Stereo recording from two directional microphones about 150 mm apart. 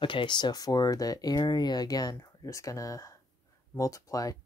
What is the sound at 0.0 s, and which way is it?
Speech, 35° left (ahead or behind).